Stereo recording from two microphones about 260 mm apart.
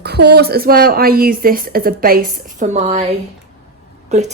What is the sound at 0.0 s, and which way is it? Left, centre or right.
Speech, right.